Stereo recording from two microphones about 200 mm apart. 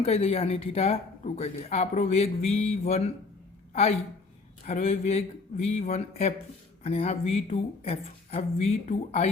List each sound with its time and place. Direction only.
0.0 s speech: 30° left (ahead or behind)